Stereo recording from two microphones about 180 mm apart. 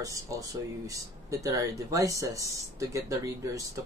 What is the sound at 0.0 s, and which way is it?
Speech, 20° right (ahead or behind).